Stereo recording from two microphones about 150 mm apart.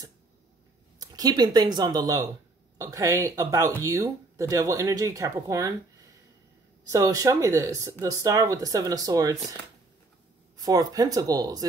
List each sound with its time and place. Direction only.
0.9 s speech: 25° right (ahead or behind)
6.9 s speech: 25° right (ahead or behind)
10.6 s speech: 25° right (ahead or behind)